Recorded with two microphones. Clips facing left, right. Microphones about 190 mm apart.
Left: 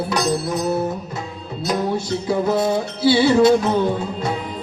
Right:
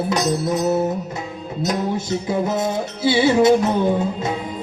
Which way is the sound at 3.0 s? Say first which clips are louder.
Left 1 dB; 20° right (ahead or behind).